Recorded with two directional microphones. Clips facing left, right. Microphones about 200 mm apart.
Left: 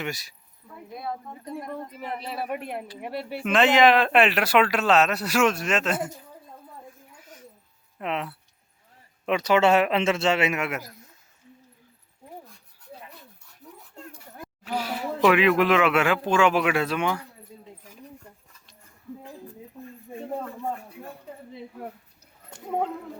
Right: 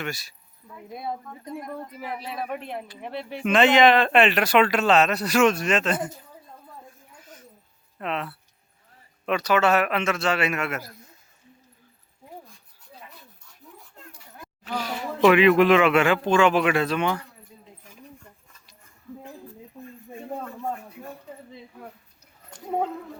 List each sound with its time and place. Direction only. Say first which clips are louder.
0.0 s speech: even; 15° left (ahead or behind)
1.6 s speech: even; 5° right (ahead or behind)
7.2 s dog: even; 10° left (ahead or behind)
7.9 s a man's voice: even; 15° left (ahead or behind)
14.6 s speech: left 1 dB; 10° left (ahead or behind)